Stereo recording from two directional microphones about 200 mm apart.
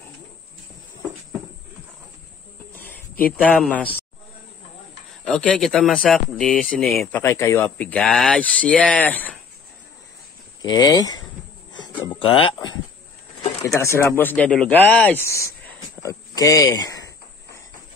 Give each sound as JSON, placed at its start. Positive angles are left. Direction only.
{"t": 2.7, "sound": "a sound", "side_deg": 10}
{"t": 3.3, "sound": "speech", "side_deg": 5}
{"t": 5.2, "sound": "speech", "side_deg": 5}
{"t": 10.6, "sound": "speech", "side_deg": 20}
{"t": 11.7, "sound": "a sound", "side_deg": 20}
{"t": 13.6, "sound": "speech", "side_deg": 10}
{"t": 16.0, "sound": "cricket", "side_deg": 15}